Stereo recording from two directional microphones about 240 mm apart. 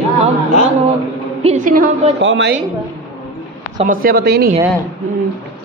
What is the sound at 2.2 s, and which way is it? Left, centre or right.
Speech, right.